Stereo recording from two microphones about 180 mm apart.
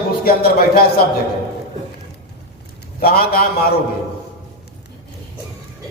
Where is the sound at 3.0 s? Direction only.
55° left (ahead or behind).